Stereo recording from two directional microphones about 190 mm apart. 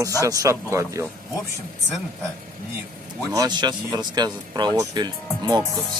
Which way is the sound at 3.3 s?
20° right (ahead or behind).